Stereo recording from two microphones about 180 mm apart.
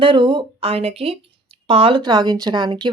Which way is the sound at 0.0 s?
30° right (ahead or behind).